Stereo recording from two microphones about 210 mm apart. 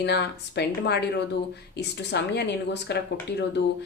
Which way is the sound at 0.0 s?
55° left (ahead or behind).